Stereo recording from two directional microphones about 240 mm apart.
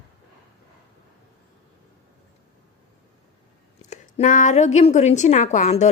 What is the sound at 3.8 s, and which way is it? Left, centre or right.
A woman's voice, left.